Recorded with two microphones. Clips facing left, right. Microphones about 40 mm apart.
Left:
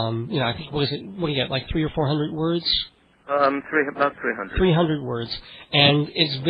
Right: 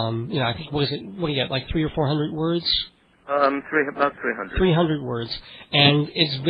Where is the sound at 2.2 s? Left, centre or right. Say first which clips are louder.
Even; right.